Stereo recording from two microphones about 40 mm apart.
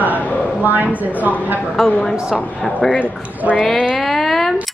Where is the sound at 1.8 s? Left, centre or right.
Centre.